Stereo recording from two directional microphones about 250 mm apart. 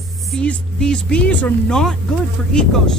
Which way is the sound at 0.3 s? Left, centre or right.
Centre.